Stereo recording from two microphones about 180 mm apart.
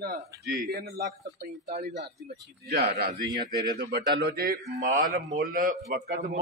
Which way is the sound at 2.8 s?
65° right (ahead or behind).